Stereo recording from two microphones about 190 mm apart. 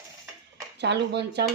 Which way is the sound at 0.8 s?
60° right (ahead or behind).